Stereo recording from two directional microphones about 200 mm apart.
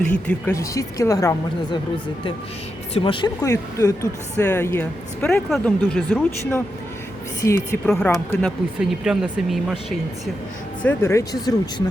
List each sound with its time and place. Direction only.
0.0 s speech: 10° left (ahead or behind)
2.9 s speech: 25° left (ahead or behind); by 6.1 s 5° left (ahead or behind)
7.4 s speech: 15° left (ahead or behind); by 10.0 s centre (ahead or behind)
10.8 s speech: 15° left (ahead or behind)